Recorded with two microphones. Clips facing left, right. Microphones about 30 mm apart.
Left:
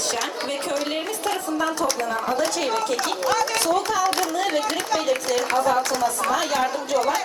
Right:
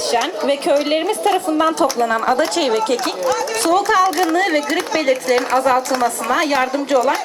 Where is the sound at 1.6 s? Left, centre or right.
Right.